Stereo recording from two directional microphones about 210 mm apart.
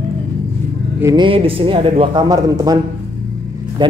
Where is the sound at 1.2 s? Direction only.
25° right (ahead or behind).